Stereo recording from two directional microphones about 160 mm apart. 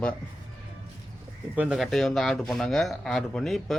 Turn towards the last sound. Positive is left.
turn(degrees=0)  # may be behind; listen again after turning